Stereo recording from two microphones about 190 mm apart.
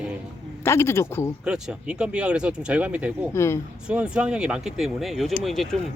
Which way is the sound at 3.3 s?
15° left (ahead or behind).